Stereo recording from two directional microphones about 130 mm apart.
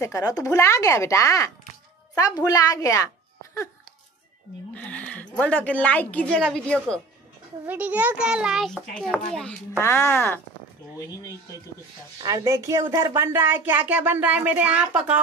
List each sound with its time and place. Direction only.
0.0 s speech: 25° left (ahead or behind)
4.7 s a woman's voice: 10° left (ahead or behind)
7.6 s a woman's voice: 10° right (ahead or behind); by 9.6 s 5° left (ahead or behind)
9.8 s speech: 20° left (ahead or behind)
12.2 s speech: 25° right (ahead or behind); by 14.9 s 10° right (ahead or behind)